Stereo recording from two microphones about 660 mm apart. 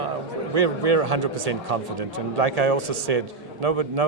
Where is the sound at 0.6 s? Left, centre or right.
Right.